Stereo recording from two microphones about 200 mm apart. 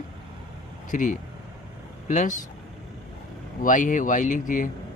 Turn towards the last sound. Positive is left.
turn(degrees=40)  # may be behind; listen again after turning